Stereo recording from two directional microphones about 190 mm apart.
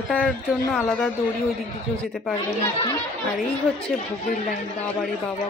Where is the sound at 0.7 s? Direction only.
Centre (ahead or behind).